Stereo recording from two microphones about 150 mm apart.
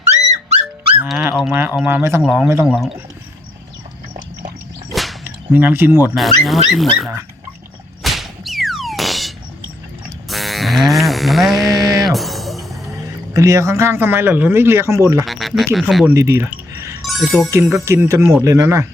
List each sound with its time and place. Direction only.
0.1 s music: 45° right (ahead or behind)
1.5 s speech: 10° right (ahead or behind)
2.6 s speech: centre (ahead or behind)
4.9 s whip: centre (ahead or behind)
5.2 s speech: 10° right (ahead or behind)
6.1 s speech: centre (ahead or behind)
8.0 s whack: centre (ahead or behind)
10.2 s music: centre (ahead or behind)
12.9 s speech: 20° right (ahead or behind)
15.2 s speech: centre (ahead or behind)
16.1 s chink: 20° right (ahead or behind)
17.0 s speech: centre (ahead or behind)
17.5 s speech: 15° right (ahead or behind)